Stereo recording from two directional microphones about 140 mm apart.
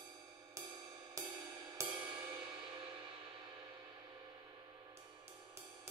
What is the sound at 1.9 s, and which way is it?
Music, 15° right (ahead or behind).